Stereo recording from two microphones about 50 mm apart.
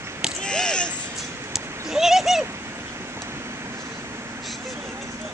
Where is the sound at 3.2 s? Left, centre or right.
Right.